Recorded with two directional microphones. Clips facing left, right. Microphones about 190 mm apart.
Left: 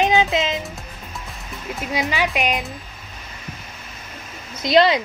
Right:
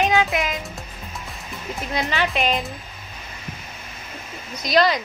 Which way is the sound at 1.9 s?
10° left (ahead or behind).